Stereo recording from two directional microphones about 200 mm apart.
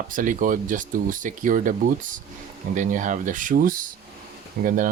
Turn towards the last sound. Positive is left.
turn(degrees=-40)  # may be behind; listen again after turning